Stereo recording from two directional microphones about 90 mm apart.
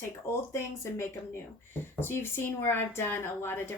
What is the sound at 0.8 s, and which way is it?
A woman's voice, 30° left (ahead or behind).